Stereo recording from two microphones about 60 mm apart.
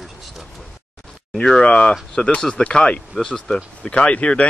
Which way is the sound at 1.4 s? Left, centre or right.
Centre.